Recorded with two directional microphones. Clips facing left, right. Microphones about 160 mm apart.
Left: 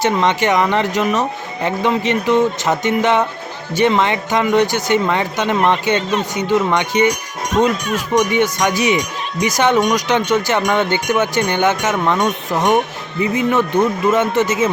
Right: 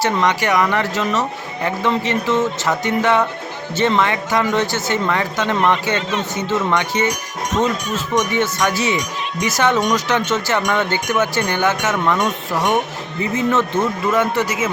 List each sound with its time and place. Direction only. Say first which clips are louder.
0.0 s speech: left 2 dB; 20° left (ahead or behind)